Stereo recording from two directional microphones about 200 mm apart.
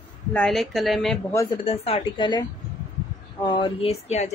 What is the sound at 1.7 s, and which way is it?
Speech, 30° left (ahead or behind).